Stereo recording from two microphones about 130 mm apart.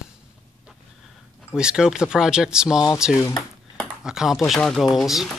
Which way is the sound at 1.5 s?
5° right (ahead or behind).